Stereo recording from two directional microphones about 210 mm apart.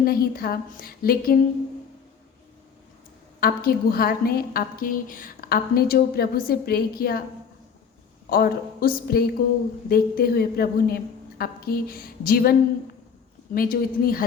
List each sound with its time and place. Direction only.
0.0 s a woman's voice: 45° left (ahead or behind)
3.4 s a woman's voice: 45° left (ahead or behind)
8.3 s a woman's voice: 45° left (ahead or behind)